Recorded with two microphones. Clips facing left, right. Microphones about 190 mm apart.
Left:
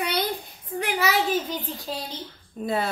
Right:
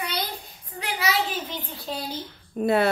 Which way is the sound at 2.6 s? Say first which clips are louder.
Right 5 dB; 70° right (ahead or behind).